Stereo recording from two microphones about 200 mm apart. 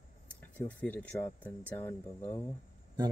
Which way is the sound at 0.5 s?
10° left (ahead or behind).